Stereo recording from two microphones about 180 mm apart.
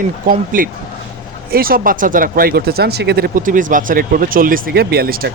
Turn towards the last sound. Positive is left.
turn(degrees=-55)  # may be behind; listen again after turning